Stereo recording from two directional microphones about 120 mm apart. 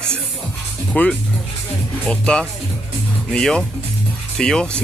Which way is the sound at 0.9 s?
10° left (ahead or behind).